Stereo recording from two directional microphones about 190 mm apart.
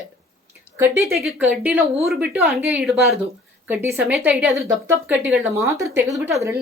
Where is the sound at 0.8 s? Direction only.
15° right (ahead or behind).